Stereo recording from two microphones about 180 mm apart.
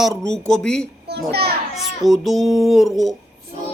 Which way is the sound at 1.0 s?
65° right (ahead or behind).